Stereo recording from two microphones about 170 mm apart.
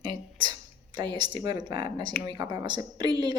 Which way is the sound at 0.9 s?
25° right (ahead or behind).